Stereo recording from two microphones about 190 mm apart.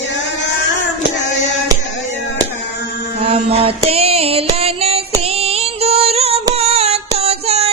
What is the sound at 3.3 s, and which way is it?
Female singing, 30° right (ahead or behind).